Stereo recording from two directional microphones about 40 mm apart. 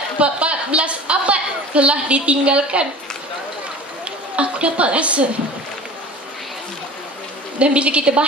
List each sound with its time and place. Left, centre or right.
0.2 s a woman's voice: right
4.4 s a woman's voice: right
7.5 s a woman's voice: right